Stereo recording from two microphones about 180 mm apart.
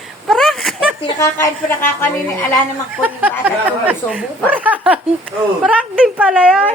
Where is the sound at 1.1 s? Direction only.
15° left (ahead or behind).